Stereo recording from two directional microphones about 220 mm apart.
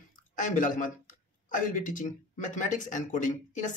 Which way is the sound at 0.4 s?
35° left (ahead or behind).